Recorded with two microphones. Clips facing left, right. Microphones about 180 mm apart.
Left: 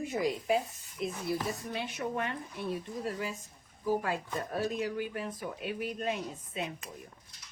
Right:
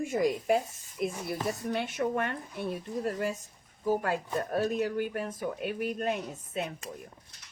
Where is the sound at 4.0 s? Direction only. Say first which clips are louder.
Right 4 dB; 50° right (ahead or behind).